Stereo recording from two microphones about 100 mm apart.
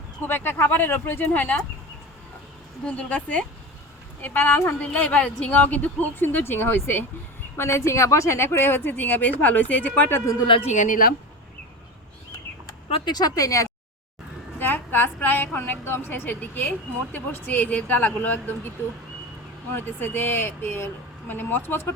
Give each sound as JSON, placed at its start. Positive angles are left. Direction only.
{"t": 0.3, "sound": "a woman's voice", "side_deg": 20}
{"t": 2.8, "sound": "a woman's voice", "side_deg": 10}
{"t": 13.1, "sound": "speech", "side_deg": 40}
{"t": 14.6, "sound": "a woman's voice", "side_deg": 20}
{"t": 19.7, "sound": "a woman's voice", "side_deg": 20}